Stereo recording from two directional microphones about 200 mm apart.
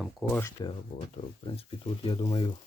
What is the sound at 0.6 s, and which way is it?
Speech, 20° left (ahead or behind).